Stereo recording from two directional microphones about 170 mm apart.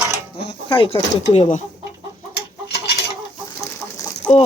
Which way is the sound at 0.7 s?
30° left (ahead or behind).